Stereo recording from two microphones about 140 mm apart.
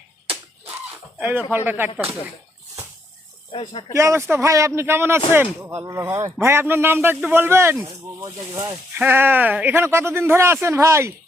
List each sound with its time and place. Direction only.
0.3 s a sound: 10° right (ahead or behind)
1.2 s speech: 15° right (ahead or behind)
3.5 s speech: 35° left (ahead or behind)
3.9 s a man's voice: 20° right (ahead or behind)